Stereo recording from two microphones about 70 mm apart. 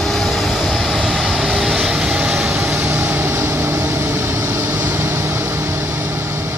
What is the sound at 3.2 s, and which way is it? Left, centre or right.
Vehicle, right.